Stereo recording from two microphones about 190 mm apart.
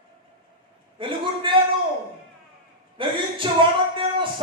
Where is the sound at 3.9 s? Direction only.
25° right (ahead or behind).